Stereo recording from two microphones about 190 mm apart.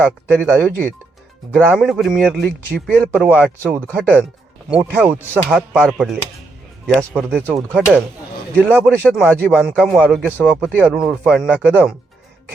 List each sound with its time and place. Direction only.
0.3 s speech: 5° left (ahead or behind)
3.1 s speech: 5° right (ahead or behind)
5.5 s speech: centre (ahead or behind)
7.8 s speech: 10° left (ahead or behind)
8.5 s speech: 10° right (ahead or behind)